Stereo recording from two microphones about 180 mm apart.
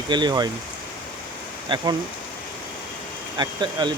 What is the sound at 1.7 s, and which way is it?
Speech, 30° right (ahead or behind).